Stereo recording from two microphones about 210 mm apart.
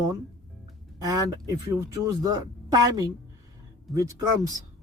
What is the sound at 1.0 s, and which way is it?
Speech, 15° right (ahead or behind).